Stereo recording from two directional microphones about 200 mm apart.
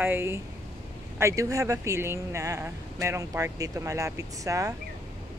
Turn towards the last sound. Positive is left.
turn(degrees=-15)  # may be behind; listen again after turning